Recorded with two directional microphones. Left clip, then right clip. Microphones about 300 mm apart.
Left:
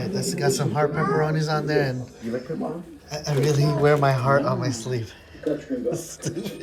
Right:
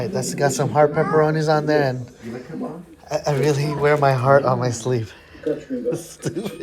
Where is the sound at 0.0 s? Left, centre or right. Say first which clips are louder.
Right 4 dB; centre.